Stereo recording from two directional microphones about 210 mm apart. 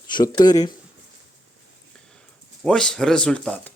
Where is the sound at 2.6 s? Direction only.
5° left (ahead or behind).